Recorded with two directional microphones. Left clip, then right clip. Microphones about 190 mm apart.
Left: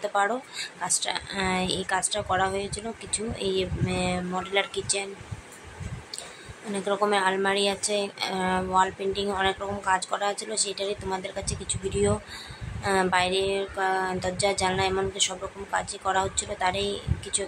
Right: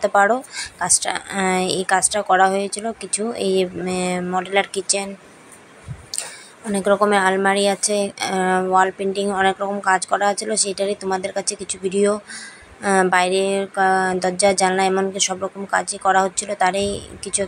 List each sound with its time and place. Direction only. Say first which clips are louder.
0.0 s speech: right 10 dB; 30° right (ahead or behind)
6.7 s speech: right 8 dB; 35° right (ahead or behind)